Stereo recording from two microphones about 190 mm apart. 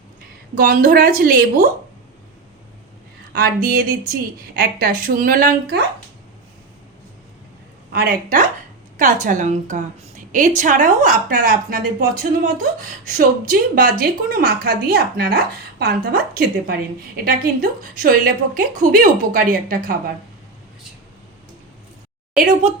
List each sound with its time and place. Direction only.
0.5 s a woman's voice: 45° right (ahead or behind)
3.3 s a woman's voice: 50° right (ahead or behind)
7.9 s a woman's voice: 50° right (ahead or behind)